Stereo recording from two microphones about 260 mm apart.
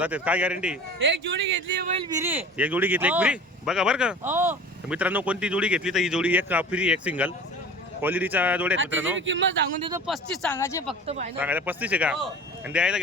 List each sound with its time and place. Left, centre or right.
0.0 s speech: centre
0.9 s speech: right
2.0 s a man's voice: centre
9.0 s speech: right
10.1 s speech: centre
11.0 s speech: right
11.3 s speech: centre